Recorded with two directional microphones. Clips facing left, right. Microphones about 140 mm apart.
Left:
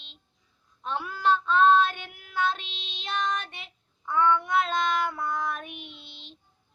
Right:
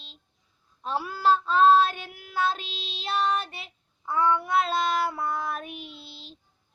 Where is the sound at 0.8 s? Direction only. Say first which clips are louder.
Right 2 dB; 35° right (ahead or behind).